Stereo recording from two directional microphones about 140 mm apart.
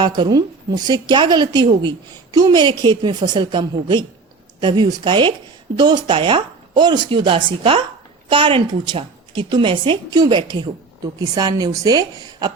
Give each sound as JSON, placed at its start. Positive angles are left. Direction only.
{"t": 0.0, "sound": "a woman's voice", "side_deg": -30}